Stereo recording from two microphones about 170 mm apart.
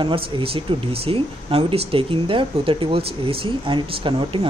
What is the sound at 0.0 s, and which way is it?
Speech, 30° right (ahead or behind).